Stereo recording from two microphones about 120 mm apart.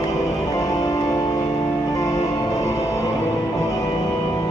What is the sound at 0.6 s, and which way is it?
Music, 30° left (ahead or behind).